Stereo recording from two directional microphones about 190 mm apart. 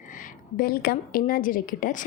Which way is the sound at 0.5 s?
50° left (ahead or behind).